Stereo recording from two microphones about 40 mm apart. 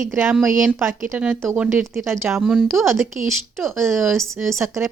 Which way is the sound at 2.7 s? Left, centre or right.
Right.